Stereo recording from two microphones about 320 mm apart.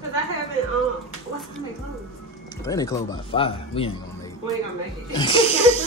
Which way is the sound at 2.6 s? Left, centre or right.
Centre.